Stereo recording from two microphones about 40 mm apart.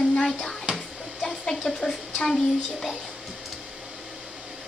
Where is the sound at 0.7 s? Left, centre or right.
Centre.